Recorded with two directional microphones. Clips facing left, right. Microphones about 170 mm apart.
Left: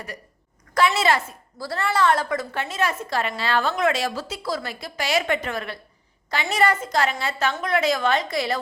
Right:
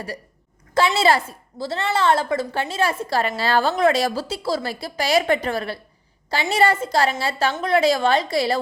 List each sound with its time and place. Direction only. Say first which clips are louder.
0.7 s a woman's voice: right 2 dB; 30° right (ahead or behind)